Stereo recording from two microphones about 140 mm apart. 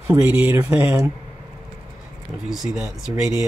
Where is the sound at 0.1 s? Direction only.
10° right (ahead or behind).